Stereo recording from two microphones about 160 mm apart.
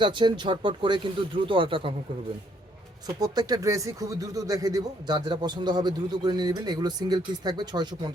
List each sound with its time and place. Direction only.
0.0 s speech: 30° right (ahead or behind)
3.3 s speech: 20° right (ahead or behind)